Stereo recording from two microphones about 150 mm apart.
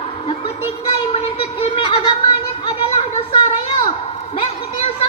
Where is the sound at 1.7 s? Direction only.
35° left (ahead or behind).